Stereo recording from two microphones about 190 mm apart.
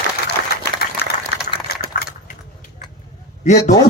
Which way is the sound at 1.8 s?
50° right (ahead or behind).